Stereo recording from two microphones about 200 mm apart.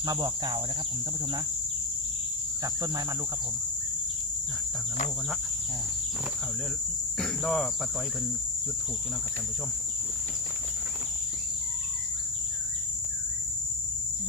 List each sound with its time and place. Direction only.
0.1 s cricket: 20° right (ahead or behind)
7.2 s cricket: centre (ahead or behind)